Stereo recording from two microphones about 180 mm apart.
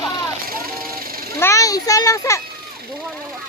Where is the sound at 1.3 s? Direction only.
15° left (ahead or behind).